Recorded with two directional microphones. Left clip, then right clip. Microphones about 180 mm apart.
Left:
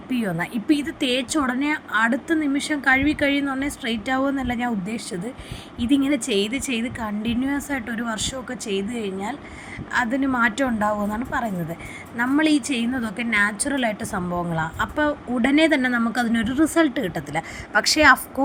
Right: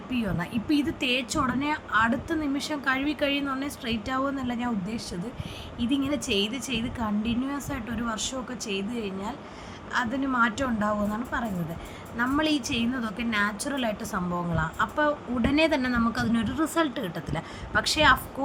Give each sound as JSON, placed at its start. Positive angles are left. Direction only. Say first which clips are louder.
{"t": 0.1, "sound": "a woman's voice", "louder": "left 5 dB", "side_deg": 25}